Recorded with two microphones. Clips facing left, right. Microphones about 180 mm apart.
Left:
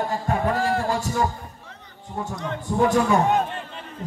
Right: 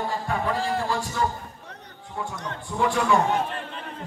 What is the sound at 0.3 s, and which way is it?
Heart sounds, 45° left (ahead or behind).